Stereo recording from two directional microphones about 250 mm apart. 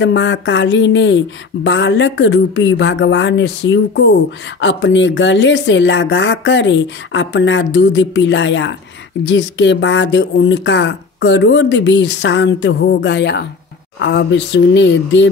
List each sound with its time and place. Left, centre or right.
0.0 s speech: left